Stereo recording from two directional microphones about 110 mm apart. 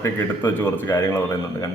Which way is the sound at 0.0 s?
20° left (ahead or behind).